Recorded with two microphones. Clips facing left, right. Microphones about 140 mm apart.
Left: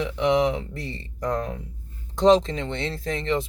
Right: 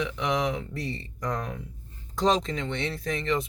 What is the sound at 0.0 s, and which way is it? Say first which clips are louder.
Speech: left 6 dB; 30° left (ahead or behind).